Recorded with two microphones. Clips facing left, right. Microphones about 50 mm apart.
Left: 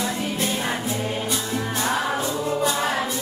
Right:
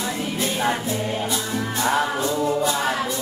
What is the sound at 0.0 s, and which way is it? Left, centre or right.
Music, centre.